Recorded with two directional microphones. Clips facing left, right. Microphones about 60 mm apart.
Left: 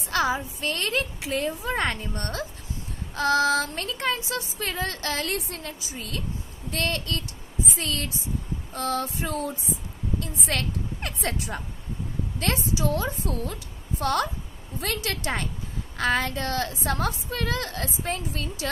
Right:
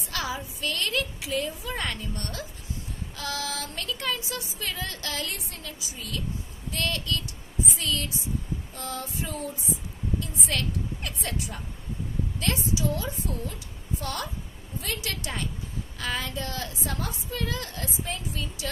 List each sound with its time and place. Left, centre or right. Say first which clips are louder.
0.1 s a woman's voice: left 7 dB; left
8.7 s a woman's voice: left 9 dB; left
10.2 s a woman's voice: left 4 dB; left